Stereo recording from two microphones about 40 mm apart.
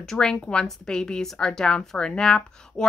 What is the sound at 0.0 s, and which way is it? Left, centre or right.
Speech, centre.